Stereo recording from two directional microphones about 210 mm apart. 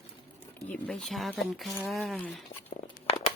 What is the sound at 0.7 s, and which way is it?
Speech, 5° left (ahead or behind).